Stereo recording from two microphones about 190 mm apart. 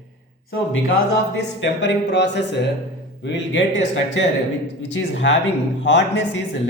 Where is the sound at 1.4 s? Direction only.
70° left (ahead or behind).